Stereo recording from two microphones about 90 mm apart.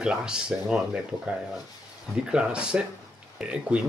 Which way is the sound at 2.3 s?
10° right (ahead or behind).